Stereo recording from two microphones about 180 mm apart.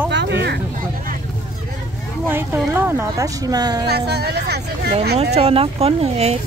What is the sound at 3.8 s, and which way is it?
Speech, 65° right (ahead or behind).